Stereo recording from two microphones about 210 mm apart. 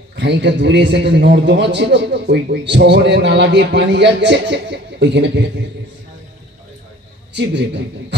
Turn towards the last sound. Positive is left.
turn(degrees=-55)  # may be behind; listen again after turning